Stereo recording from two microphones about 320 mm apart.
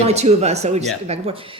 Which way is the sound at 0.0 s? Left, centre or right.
Centre.